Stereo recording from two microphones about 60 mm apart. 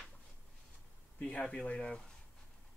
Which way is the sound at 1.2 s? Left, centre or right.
Centre.